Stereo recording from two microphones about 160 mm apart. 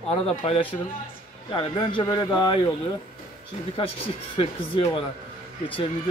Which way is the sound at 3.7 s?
35° left (ahead or behind).